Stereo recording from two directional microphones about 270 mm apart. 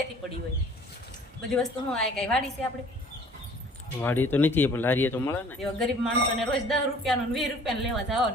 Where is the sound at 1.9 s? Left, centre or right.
Centre.